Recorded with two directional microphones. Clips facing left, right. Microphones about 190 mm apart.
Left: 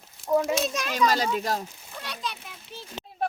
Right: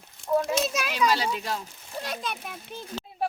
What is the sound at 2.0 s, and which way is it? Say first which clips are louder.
Speech: right 3 dB; 50° right (ahead or behind).